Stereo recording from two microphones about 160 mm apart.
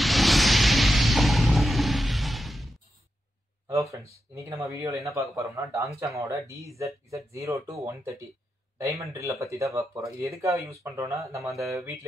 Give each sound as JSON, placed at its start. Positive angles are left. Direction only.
{"t": 0.0, "sound": "toilet flush", "side_deg": 0}
{"t": 3.6, "sound": "speech", "side_deg": -20}